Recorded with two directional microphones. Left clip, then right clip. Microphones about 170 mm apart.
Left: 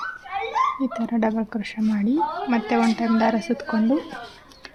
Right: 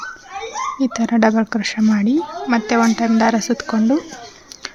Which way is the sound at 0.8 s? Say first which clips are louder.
Right 7 dB; 35° right (ahead or behind).